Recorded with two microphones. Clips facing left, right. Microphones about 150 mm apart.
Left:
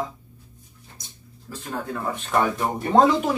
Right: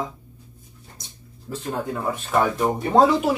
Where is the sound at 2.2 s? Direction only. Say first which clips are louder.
Right 2 dB; centre (ahead or behind).